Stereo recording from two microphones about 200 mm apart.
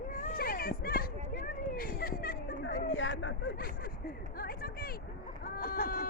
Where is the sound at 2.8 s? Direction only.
70° left (ahead or behind).